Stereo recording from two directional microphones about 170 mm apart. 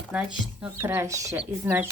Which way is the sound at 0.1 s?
5° right (ahead or behind).